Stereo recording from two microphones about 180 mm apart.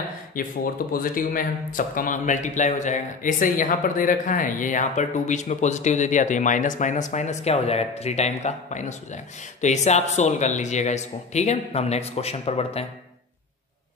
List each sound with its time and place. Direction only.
0.4 s speech: 50° left (ahead or behind); by 12.8 s 35° left (ahead or behind)